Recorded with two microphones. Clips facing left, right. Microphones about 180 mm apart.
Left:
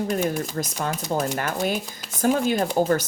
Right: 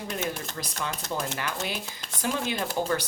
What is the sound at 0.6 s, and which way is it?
Speech, 45° left (ahead or behind).